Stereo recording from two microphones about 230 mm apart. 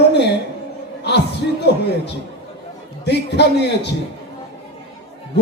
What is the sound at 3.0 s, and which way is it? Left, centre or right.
Speech, left.